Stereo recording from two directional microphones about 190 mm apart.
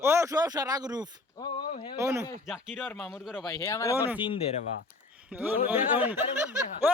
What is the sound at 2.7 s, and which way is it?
Speech, 10° left (ahead or behind).